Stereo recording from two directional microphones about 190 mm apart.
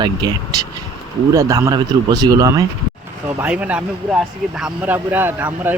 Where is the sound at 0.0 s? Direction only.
20° right (ahead or behind).